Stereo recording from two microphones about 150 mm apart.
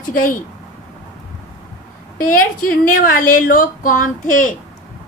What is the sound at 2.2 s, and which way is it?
A woman's voice, 70° left (ahead or behind).